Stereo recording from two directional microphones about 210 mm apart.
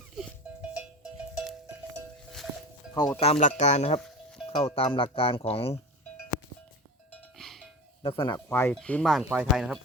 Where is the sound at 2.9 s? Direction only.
20° left (ahead or behind).